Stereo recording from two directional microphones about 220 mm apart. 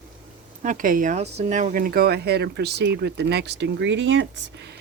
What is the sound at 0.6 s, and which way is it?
Speech, 35° right (ahead or behind).